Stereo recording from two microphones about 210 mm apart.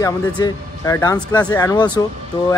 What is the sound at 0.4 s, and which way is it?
A man's voice, 15° left (ahead or behind).